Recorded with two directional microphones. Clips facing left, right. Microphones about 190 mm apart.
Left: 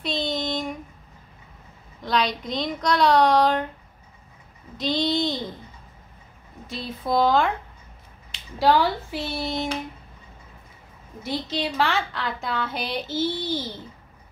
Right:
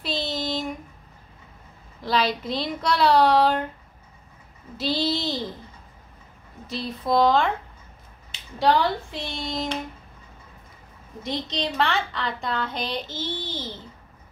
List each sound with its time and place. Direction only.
0.0 s child singing: 5° right (ahead or behind)
2.0 s a woman's voice: 5° right (ahead or behind)
4.7 s a woman's voice: 5° right (ahead or behind)
6.7 s a woman's voice: centre (ahead or behind)
8.5 s a woman's voice: centre (ahead or behind)
11.2 s a woman's voice: 5° left (ahead or behind)